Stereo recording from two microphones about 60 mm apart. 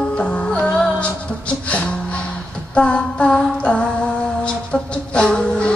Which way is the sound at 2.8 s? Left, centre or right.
Centre.